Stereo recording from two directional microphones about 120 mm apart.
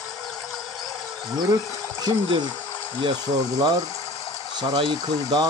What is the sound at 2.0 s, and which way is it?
Speech, 35° right (ahead or behind).